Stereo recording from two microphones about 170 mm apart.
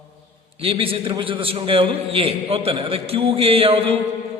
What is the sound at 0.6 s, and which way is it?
A man's voice, 30° right (ahead or behind).